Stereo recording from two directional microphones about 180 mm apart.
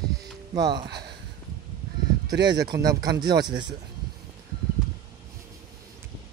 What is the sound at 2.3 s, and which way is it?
Speech, 20° right (ahead or behind).